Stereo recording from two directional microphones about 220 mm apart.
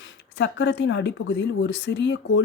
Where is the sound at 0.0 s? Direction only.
50° left (ahead or behind).